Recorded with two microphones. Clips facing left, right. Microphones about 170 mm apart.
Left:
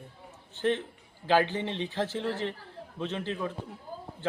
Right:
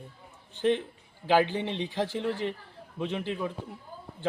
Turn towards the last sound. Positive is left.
turn(degrees=-15)  # may be behind; listen again after turning